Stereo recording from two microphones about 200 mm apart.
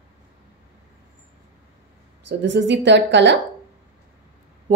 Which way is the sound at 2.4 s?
65° right (ahead or behind).